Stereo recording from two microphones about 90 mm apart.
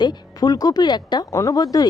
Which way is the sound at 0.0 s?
50° left (ahead or behind).